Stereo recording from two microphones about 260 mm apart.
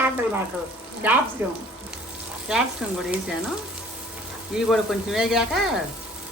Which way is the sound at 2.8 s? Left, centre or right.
Centre.